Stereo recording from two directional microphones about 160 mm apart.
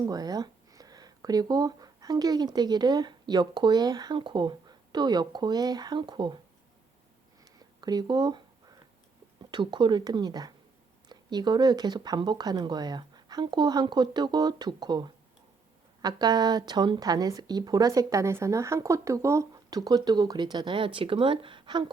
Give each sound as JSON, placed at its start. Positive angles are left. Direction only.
{"t": 0.0, "sound": "speech", "side_deg": -25}
{"t": 7.8, "sound": "a sound", "side_deg": -25}
{"t": 9.5, "sound": "a woman's voice", "side_deg": -30}